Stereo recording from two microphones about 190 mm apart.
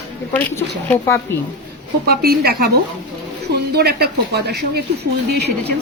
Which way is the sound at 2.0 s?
55° right (ahead or behind).